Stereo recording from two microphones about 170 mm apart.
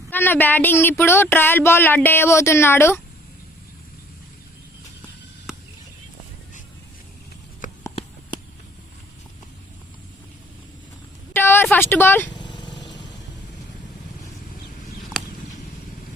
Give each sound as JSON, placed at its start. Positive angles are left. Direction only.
{"t": 0.1, "sound": "speech", "side_deg": 10}
{"t": 7.6, "sound": "a sound", "side_deg": 50}
{"t": 11.3, "sound": "speech", "side_deg": 15}
{"t": 12.3, "sound": "vehicle", "side_deg": 25}